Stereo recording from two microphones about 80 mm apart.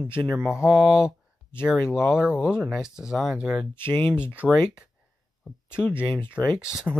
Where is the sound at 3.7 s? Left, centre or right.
Left.